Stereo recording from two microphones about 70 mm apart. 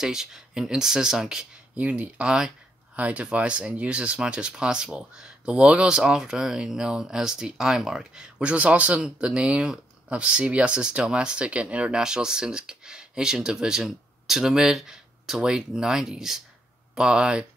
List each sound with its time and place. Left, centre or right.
0.0 s speech: centre
1.8 s speech: right